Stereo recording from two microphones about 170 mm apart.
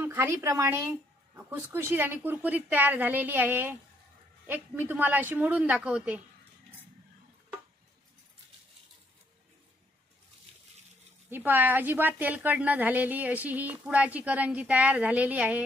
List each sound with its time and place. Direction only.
0.0 s a woman's voice: 10° right (ahead or behind)
11.2 s a woman's voice: 10° right (ahead or behind)